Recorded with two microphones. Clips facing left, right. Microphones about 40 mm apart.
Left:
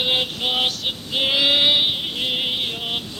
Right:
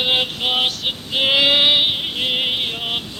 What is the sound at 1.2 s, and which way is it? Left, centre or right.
Female singing, right.